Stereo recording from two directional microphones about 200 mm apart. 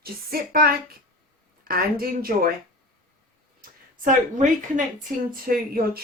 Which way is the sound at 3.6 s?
40° right (ahead or behind).